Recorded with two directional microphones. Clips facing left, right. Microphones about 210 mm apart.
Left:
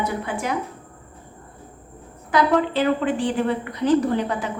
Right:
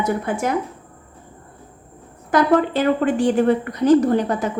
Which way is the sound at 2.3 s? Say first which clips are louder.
Right 3 dB; 45° right (ahead or behind).